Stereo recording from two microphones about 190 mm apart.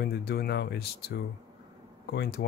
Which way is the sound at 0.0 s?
60° left (ahead or behind).